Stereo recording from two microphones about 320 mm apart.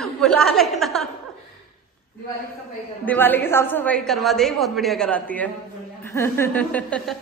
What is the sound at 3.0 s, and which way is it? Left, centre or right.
A woman's voice, centre.